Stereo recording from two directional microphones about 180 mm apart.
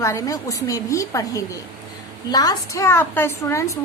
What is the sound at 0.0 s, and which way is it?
A woman's voice, 15° left (ahead or behind).